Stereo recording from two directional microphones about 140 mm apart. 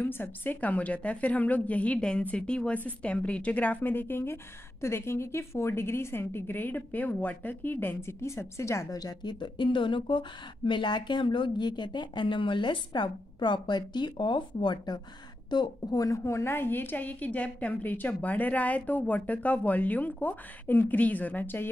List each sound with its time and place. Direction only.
0.0 s a woman's voice: 15° left (ahead or behind)